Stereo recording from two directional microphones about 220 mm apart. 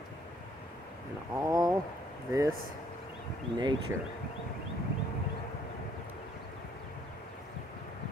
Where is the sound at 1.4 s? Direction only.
15° right (ahead or behind).